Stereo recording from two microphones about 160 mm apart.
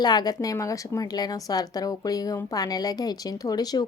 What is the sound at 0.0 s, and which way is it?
A woman's voice, 25° left (ahead or behind).